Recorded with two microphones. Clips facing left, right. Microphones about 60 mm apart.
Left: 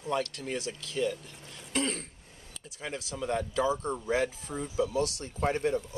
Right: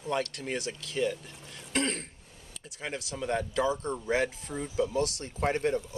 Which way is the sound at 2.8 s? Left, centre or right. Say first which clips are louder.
Even; centre.